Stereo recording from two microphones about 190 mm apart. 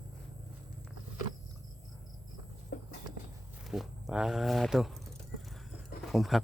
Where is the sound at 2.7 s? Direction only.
50° left (ahead or behind).